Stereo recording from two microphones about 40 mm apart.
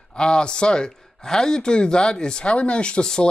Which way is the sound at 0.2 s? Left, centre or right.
Left.